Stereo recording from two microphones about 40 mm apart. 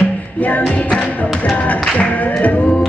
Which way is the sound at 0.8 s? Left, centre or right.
Left.